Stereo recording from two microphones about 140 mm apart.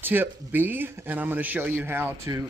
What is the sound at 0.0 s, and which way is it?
Speech, 15° right (ahead or behind).